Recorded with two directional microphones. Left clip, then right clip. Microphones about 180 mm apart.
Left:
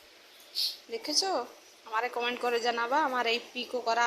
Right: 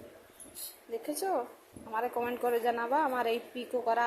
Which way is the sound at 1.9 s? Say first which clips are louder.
Left 2 dB; 5° right (ahead or behind).